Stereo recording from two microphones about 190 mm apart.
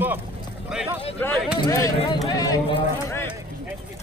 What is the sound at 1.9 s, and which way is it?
Speech, 30° left (ahead or behind).